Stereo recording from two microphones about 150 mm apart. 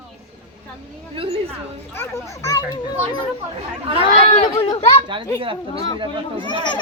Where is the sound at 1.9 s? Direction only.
15° left (ahead or behind).